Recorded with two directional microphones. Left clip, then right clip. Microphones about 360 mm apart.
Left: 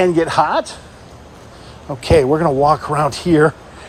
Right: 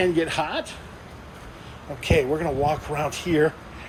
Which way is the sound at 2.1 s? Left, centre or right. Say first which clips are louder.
Left 10 dB; left.